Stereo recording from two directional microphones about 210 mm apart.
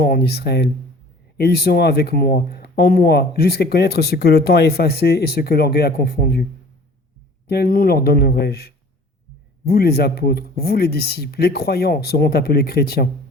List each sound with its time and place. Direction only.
0.0 s speech: 50° left (ahead or behind)
7.4 s speech: 50° left (ahead or behind)